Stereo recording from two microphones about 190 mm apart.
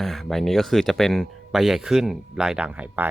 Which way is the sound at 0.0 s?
Centre (ahead or behind).